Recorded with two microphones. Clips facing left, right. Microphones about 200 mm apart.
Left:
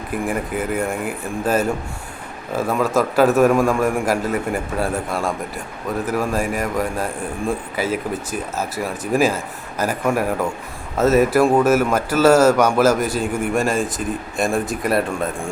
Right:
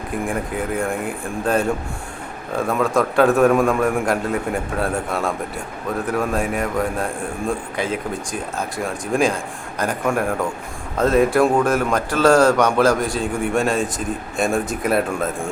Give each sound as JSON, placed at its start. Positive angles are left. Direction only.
{"t": 0.3, "sound": "speech", "side_deg": 5}